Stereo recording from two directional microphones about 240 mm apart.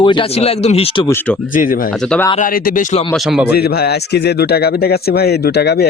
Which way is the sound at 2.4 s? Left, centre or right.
Left.